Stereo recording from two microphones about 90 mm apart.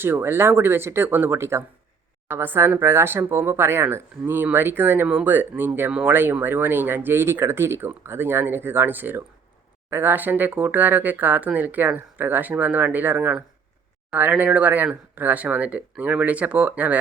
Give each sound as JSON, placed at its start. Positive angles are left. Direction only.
{"t": 0.0, "sound": "speech", "side_deg": -25}